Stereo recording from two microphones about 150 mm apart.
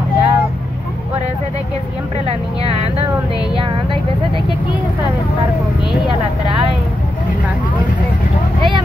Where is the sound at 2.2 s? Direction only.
40° right (ahead or behind).